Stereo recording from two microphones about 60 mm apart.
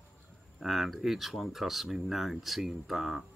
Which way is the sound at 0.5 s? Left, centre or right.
Centre.